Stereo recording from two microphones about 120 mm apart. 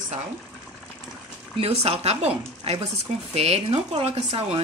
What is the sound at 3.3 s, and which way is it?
Speech, 60° right (ahead or behind).